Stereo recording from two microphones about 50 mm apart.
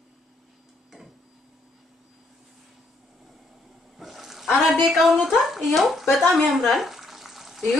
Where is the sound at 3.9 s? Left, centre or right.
Centre.